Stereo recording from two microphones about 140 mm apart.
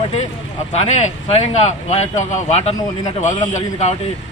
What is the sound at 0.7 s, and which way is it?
Speech, 50° left (ahead or behind).